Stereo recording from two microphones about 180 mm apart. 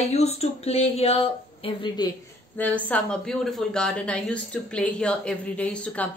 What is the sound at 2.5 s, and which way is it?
Speech, 10° left (ahead or behind).